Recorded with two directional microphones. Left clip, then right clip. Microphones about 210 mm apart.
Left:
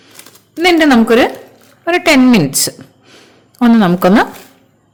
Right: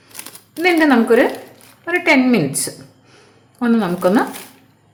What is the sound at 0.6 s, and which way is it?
A woman's voice, 45° left (ahead or behind).